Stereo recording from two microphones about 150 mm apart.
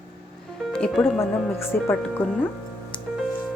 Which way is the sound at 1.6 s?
15° left (ahead or behind).